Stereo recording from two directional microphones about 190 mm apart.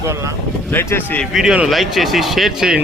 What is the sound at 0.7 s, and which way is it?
Speech, 10° left (ahead or behind).